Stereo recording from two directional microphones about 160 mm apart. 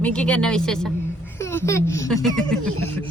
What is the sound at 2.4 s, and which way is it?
Speech, 5° left (ahead or behind).